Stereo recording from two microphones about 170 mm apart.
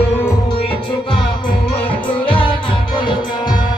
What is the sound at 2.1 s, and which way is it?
Music, 30° left (ahead or behind).